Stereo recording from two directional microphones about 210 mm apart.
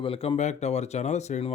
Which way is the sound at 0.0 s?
25° left (ahead or behind).